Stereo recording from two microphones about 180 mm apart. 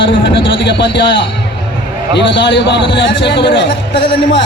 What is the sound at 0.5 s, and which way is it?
Speech, 90° left.